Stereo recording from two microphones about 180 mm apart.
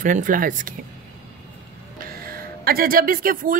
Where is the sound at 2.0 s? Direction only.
55° right (ahead or behind).